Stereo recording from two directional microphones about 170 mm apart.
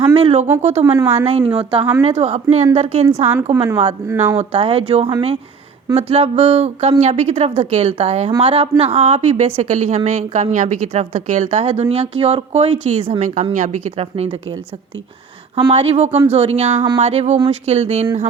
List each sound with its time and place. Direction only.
0.1 s a woman's voice: 35° right (ahead or behind)
0.9 s a woman's voice: 10° right (ahead or behind)
1.1 s a woman's voice: 35° right (ahead or behind)
3.1 s a woman's voice: 10° right (ahead or behind)
4.4 s a woman's voice: 40° right (ahead or behind)
15.7 s a woman's voice: 40° right (ahead or behind)